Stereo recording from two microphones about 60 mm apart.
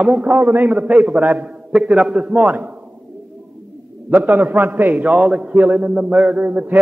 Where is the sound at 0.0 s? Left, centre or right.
Right.